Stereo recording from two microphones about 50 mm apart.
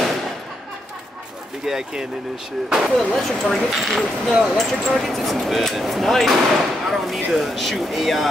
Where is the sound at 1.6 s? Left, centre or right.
Centre.